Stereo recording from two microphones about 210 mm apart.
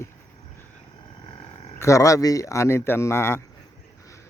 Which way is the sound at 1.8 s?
15° left (ahead or behind).